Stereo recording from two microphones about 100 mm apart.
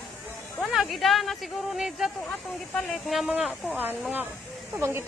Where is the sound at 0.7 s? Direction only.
Centre (ahead or behind).